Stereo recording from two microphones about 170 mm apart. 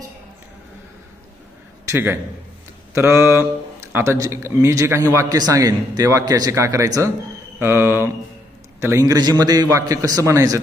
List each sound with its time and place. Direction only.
1.9 s a man's voice: 15° right (ahead or behind)